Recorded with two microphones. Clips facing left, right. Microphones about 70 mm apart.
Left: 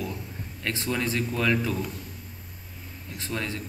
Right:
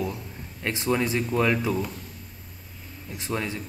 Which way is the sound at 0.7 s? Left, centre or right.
Centre.